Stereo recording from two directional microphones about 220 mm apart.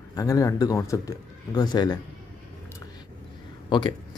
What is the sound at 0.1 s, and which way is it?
A man's voice, 15° left (ahead or behind).